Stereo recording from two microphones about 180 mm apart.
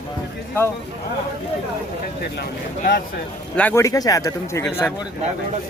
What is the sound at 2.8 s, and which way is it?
Speech, 55° left (ahead or behind).